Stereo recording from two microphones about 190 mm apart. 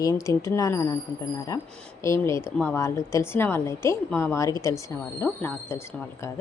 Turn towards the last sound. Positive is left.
turn(degrees=15)  # may be behind; listen again after turning